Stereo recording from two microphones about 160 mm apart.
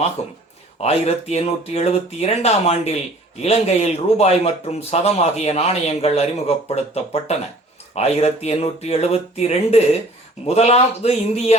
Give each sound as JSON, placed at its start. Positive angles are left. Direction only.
{"t": 0.2, "sound": "speech", "side_deg": 40}